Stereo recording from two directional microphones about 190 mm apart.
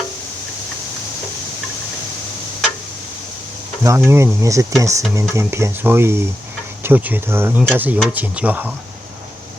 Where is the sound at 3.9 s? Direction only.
15° right (ahead or behind).